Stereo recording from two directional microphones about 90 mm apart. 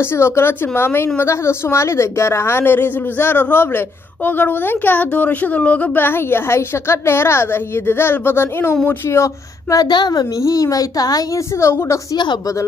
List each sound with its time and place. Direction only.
0.0 s a woman's voice: 30° left (ahead or behind)
9.8 s a woman's voice: 55° left (ahead or behind)
11.5 s speech: 30° left (ahead or behind)